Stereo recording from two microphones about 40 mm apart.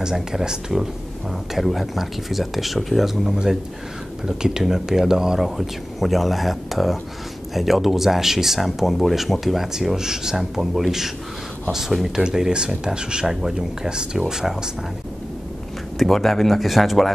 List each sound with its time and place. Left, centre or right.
0.0 s speech: centre
1.5 s speech: centre
4.3 s speech: centre
5.6 s speech: centre
12.2 s speech: centre
16.0 s speech: centre